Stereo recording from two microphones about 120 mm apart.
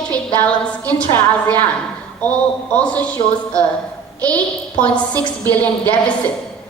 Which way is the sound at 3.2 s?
45° left (ahead or behind).